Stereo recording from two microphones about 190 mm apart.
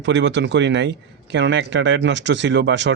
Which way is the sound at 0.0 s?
70° right (ahead or behind).